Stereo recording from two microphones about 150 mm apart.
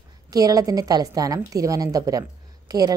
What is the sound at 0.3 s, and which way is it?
A woman's voice, 25° right (ahead or behind).